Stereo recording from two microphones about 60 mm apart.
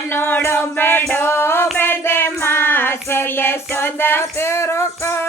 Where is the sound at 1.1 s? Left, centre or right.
Left.